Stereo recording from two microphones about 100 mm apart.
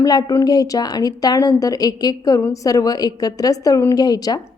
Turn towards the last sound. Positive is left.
turn(degrees=40)  # may be behind; listen again after turning